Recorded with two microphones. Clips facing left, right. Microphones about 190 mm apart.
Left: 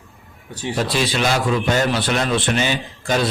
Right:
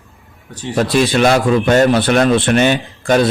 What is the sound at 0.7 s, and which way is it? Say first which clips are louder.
A man's voice: right 7 dB; 50° right (ahead or behind).